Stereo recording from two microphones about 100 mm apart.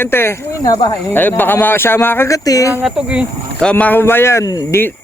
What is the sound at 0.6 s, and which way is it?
Speech, 45° left (ahead or behind).